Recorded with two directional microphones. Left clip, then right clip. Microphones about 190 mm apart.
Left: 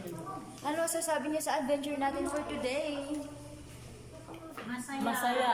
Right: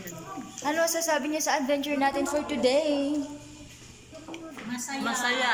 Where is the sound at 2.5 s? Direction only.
30° right (ahead or behind).